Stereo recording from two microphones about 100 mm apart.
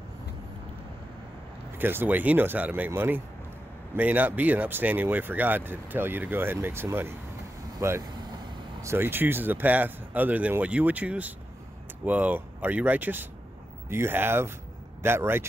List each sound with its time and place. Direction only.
1.8 s speech: 20° right (ahead or behind)
8.0 s vehicle: 45° right (ahead or behind)
8.8 s speech: 20° right (ahead or behind)